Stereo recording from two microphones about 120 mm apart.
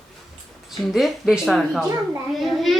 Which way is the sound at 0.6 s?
Centre (ahead or behind).